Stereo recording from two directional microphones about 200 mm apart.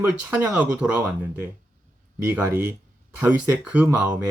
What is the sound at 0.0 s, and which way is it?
Speech, 10° right (ahead or behind).